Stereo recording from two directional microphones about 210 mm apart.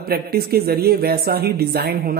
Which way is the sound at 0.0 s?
45° right (ahead or behind).